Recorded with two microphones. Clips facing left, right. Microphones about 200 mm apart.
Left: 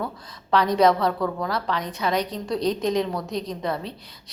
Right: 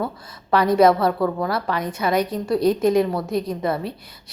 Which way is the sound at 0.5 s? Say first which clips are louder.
Right 3 dB; 10° right (ahead or behind).